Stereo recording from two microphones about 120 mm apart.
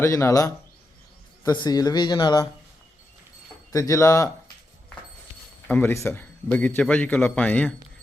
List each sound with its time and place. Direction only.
0.0 s speech: 25° left (ahead or behind)
3.7 s speech: 30° left (ahead or behind)
5.6 s a man's voice: 15° left (ahead or behind)